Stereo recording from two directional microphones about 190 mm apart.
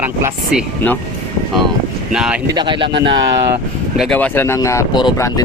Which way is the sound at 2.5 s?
25° right (ahead or behind).